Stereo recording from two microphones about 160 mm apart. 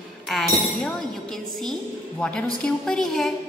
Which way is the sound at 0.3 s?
Centre (ahead or behind).